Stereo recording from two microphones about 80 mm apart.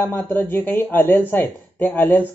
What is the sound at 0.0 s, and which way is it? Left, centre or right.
Speech, left.